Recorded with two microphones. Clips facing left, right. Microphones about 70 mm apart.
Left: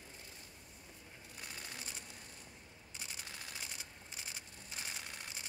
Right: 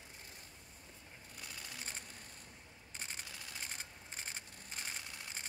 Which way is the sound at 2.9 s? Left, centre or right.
Right.